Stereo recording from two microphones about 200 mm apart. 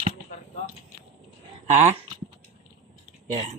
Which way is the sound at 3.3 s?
35° right (ahead or behind).